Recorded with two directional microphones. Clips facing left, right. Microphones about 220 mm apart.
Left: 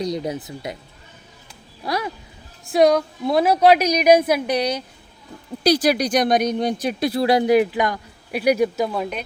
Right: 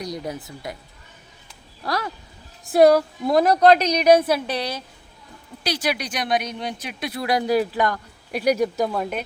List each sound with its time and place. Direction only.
0.0 s speech: 20° left (ahead or behind)
1.8 s a woman's voice: 10° left (ahead or behind)
2.7 s a woman's voice: 5° right (ahead or behind); by 4.8 s 15° left (ahead or behind)
5.6 s speech: 40° left (ahead or behind); by 9.2 s centre (ahead or behind)